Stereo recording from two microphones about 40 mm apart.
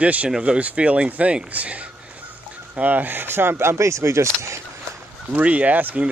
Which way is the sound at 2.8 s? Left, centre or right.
Right.